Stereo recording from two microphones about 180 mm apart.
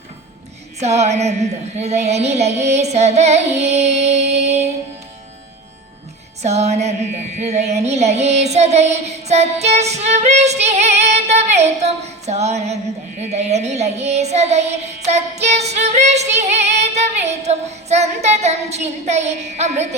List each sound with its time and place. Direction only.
0.8 s child singing: 40° right (ahead or behind)
6.4 s child singing: 40° right (ahead or behind)